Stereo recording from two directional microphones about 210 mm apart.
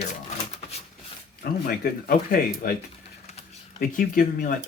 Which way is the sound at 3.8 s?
40° left (ahead or behind).